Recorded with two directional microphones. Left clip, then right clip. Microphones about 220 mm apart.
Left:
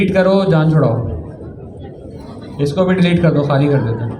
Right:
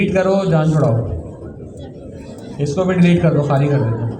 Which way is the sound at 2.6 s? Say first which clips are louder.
Left 2 dB; 50° left (ahead or behind).